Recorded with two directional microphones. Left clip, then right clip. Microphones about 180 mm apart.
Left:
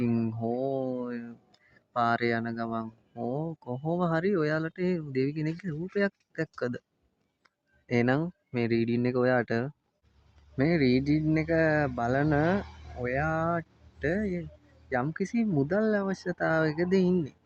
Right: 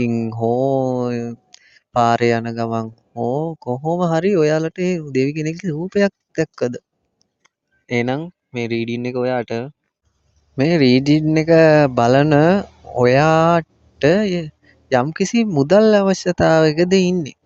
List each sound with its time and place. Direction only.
0.1 s mantra: 20° right (ahead or behind)
0.4 s a sound: 35° right (ahead or behind)
3.2 s speech: 30° right (ahead or behind)
8.2 s speech: 10° right (ahead or behind)
10.6 s speech: 40° right (ahead or behind)